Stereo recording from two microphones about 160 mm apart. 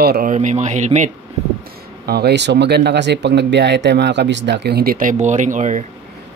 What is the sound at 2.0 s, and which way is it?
Speech, 90° right.